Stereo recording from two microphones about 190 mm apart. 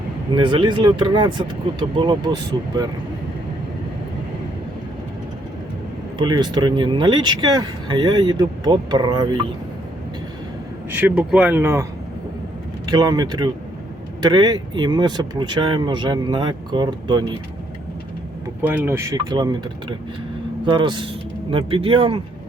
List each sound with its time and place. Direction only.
0.3 s speech: 25° right (ahead or behind)
6.1 s speech: 25° right (ahead or behind)
10.9 s speech: 5° right (ahead or behind); by 17.3 s 25° right (ahead or behind)
18.6 s speech: 10° right (ahead or behind)
20.7 s speech: 25° right (ahead or behind)